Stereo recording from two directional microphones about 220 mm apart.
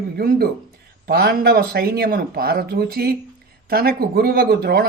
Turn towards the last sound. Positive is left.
turn(degrees=-45)  # may be behind; listen again after turning